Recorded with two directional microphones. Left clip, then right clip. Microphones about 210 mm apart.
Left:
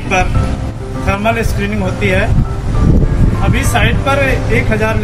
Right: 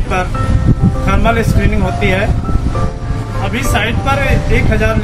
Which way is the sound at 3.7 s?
5° left (ahead or behind).